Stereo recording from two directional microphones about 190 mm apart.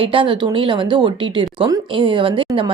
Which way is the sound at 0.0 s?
25° right (ahead or behind).